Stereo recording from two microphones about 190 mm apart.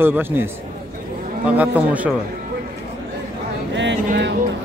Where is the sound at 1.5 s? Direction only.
5° right (ahead or behind).